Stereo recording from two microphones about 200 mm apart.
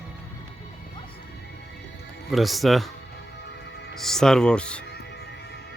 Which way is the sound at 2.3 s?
Centre (ahead or behind).